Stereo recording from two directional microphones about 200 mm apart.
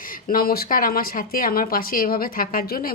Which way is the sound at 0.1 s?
45° left (ahead or behind).